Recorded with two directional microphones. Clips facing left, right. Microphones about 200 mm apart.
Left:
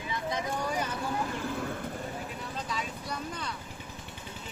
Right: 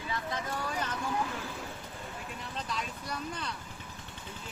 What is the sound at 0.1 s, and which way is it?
Vehicle, 20° left (ahead or behind).